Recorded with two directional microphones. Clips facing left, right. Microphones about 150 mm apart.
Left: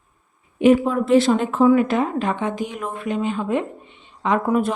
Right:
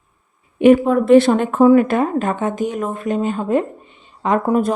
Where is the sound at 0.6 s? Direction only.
55° right (ahead or behind).